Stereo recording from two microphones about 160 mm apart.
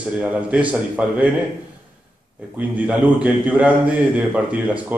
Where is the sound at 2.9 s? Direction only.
10° right (ahead or behind).